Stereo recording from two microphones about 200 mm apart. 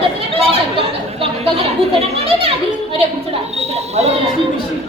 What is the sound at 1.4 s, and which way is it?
Chatter, 30° right (ahead or behind).